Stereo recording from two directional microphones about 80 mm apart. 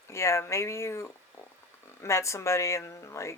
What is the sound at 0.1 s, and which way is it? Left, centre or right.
Speech, left.